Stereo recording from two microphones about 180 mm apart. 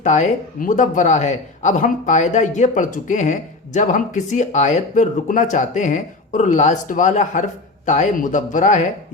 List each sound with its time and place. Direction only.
0.0 s speech: 40° left (ahead or behind)